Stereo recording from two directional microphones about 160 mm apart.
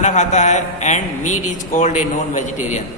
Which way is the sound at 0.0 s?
50° left (ahead or behind).